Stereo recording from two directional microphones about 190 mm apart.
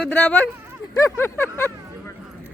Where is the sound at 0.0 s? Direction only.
5° left (ahead or behind).